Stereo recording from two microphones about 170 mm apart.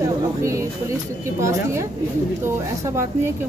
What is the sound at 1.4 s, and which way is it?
Speech, 15° right (ahead or behind).